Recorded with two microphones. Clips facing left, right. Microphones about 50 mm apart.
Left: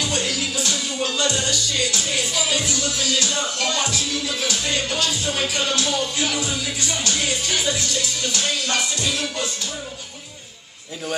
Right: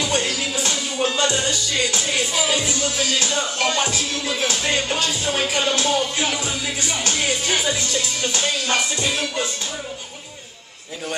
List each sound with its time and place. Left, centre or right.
0.0 s music: right